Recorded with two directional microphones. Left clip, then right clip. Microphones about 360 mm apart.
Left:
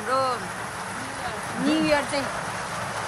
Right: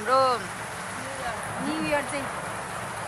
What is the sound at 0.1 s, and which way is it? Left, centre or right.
Vehicle, centre.